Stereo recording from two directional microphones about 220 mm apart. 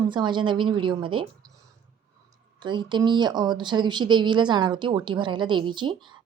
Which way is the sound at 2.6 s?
20° right (ahead or behind).